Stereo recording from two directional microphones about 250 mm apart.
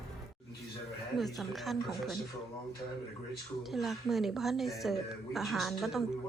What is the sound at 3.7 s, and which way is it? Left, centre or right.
Speech, centre.